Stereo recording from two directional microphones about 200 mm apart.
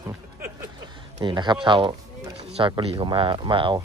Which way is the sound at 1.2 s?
20° right (ahead or behind).